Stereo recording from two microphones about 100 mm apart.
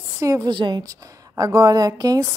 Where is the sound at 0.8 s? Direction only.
35° right (ahead or behind).